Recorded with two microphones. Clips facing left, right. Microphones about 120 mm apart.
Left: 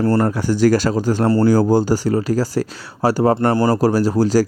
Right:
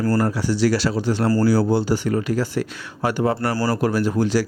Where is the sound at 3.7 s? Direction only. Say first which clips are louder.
Left 4 dB; 35° left (ahead or behind).